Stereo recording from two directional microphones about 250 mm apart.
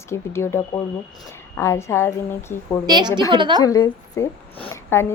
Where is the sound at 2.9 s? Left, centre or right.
Centre.